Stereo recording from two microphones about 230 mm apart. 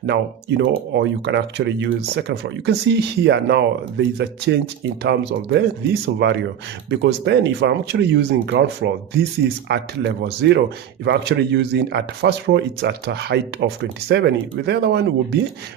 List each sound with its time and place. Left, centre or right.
0.5 s speech: right